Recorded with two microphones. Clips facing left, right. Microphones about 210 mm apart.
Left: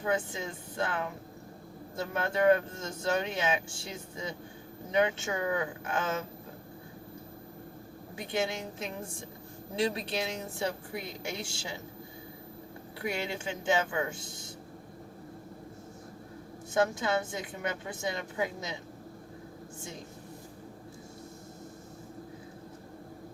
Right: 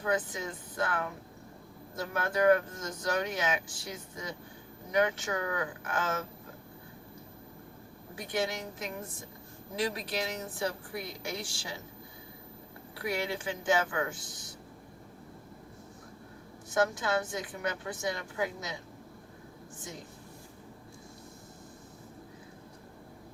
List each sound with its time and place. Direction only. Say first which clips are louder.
0.0 s speech: even; 25° left (ahead or behind)
8.1 s speech: left 1 dB; 25° left (ahead or behind)
13.0 s speech: right 1 dB; 25° left (ahead or behind)
16.7 s speech: left 1 dB; 25° left (ahead or behind)